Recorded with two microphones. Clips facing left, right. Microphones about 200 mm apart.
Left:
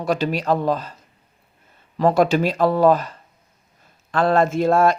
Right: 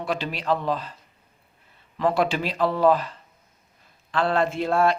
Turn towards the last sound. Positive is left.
turn(degrees=45)  # may be behind; listen again after turning